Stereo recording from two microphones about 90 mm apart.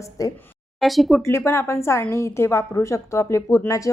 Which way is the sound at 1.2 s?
30° left (ahead or behind).